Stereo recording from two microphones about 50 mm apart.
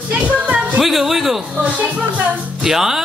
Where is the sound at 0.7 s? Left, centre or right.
Centre.